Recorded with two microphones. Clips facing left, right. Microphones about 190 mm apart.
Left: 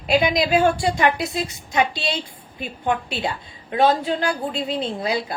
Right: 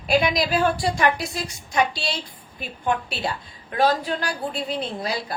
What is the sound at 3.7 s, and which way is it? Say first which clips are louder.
A woman's voice: left 3 dB; 25° left (ahead or behind).